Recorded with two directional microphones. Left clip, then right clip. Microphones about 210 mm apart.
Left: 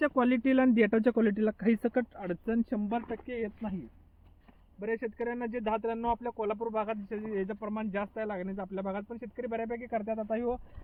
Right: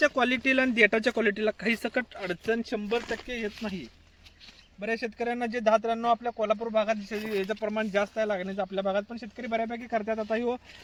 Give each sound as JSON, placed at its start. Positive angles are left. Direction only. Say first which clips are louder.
{"t": 0.0, "sound": "speech", "louder": "right 4 dB", "side_deg": 40}
{"t": 4.8, "sound": "speech", "louder": "right 3 dB", "side_deg": 20}